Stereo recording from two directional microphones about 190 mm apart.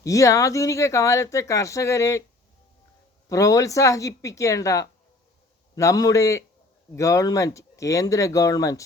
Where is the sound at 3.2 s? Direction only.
15° left (ahead or behind).